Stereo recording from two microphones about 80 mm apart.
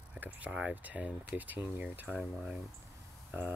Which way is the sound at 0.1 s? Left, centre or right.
Centre.